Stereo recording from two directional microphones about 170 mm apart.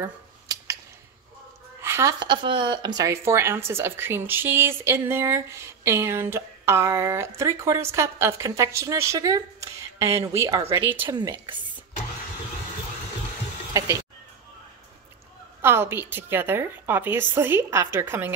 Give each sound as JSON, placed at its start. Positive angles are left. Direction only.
{"t": 0.0, "sound": "a sound", "side_deg": -20}
{"t": 1.8, "sound": "speech", "side_deg": -15}
{"t": 11.1, "sound": "speech", "side_deg": -25}
{"t": 13.7, "sound": "speech", "side_deg": -20}
{"t": 15.6, "sound": "speech", "side_deg": -15}